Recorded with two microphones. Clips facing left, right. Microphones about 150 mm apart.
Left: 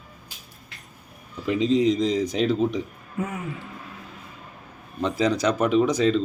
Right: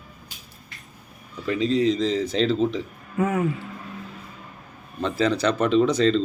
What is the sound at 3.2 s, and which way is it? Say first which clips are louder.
Speech: right 7 dB; 90° right.